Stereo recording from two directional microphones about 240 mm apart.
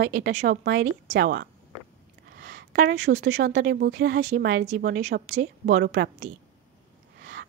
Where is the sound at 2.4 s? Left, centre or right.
Right.